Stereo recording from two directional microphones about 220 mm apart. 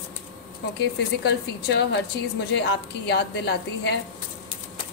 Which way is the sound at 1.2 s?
50° left (ahead or behind).